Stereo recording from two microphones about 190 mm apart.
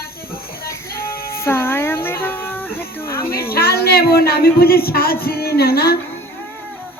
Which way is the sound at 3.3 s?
55° left (ahead or behind).